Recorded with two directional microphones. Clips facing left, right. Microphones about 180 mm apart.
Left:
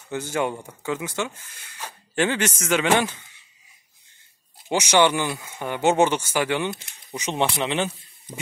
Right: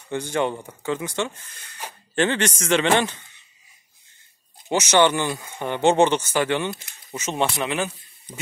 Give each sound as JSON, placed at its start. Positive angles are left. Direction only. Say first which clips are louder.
{"t": 0.1, "sound": "speech", "louder": "right 2 dB", "side_deg": 5}
{"t": 4.6, "sound": "speech", "louder": "right 1 dB", "side_deg": 10}
{"t": 7.6, "sound": "speech", "louder": "left 1 dB", "side_deg": 25}